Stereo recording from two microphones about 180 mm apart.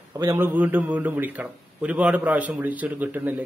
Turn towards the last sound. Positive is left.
turn(degrees=-10)  # may be behind; listen again after turning